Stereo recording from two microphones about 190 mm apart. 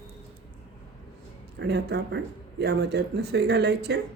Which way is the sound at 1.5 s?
60° right (ahead or behind).